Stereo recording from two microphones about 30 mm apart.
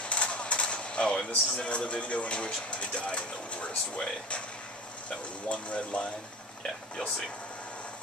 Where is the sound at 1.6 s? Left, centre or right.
Left.